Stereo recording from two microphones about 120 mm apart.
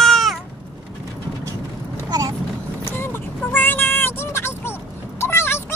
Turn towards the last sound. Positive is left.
turn(degrees=20)  # may be behind; listen again after turning